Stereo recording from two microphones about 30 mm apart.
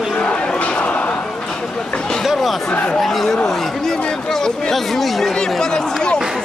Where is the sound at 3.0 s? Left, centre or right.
Centre.